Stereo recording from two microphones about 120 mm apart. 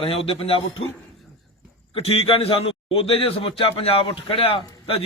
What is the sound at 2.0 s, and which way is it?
A man's voice, 50° left (ahead or behind).